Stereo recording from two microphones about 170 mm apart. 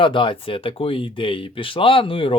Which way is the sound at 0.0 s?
30° left (ahead or behind).